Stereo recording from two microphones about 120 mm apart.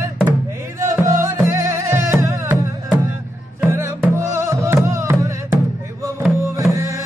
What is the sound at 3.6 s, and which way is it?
Music, 20° right (ahead or behind).